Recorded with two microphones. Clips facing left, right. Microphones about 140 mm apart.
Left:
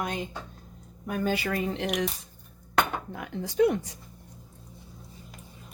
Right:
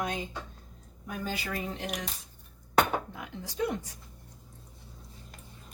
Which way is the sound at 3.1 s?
65° left (ahead or behind).